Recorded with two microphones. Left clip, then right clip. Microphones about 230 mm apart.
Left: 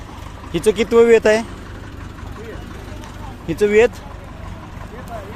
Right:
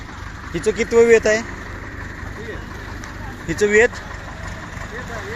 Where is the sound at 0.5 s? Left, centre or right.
Left.